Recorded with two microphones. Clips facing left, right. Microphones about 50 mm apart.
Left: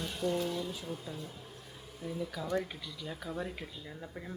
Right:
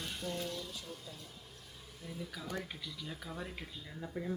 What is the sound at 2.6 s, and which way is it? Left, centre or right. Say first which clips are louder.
Speech: left 3 dB; centre.